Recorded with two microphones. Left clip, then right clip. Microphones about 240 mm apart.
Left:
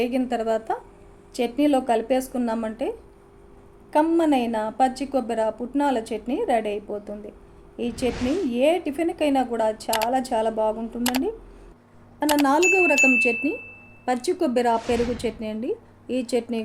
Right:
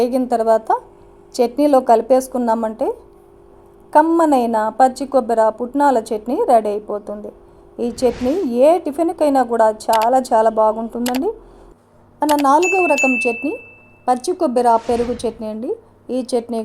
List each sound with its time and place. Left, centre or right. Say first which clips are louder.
0.0 s a woman's voice: right 8 dB; centre
3.9 s a woman's voice: right 7 dB; centre
8.1 s speech: right 6 dB; centre
8.5 s a woman's voice: right 9 dB; right
12.2 s speech: right 6 dB; centre
14.0 s a woman's voice: right 6 dB; centre
14.8 s speech: right 5 dB; centre
15.2 s a woman's voice: right 5 dB; centre